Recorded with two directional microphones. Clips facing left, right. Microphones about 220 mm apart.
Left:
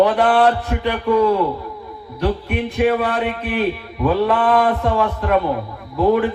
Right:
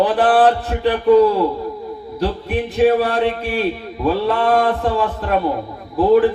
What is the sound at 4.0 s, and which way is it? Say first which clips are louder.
Mantra: left 1 dB; 30° right (ahead or behind).